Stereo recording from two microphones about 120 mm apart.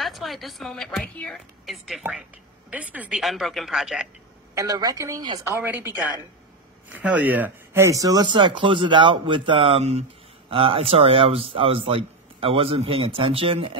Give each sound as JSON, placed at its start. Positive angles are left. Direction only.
{"t": 0.0, "sound": "a woman's voice", "side_deg": 0}
{"t": 2.7, "sound": "speech", "side_deg": -10}
{"t": 3.2, "sound": "a woman's voice", "side_deg": 0}
{"t": 4.6, "sound": "a woman's voice", "side_deg": -35}
{"t": 5.9, "sound": "speech", "side_deg": -10}
{"t": 7.8, "sound": "a man's voice", "side_deg": -30}
{"t": 10.5, "sound": "a man's voice", "side_deg": -50}